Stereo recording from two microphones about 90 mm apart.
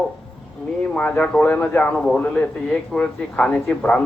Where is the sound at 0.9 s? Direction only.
10° left (ahead or behind).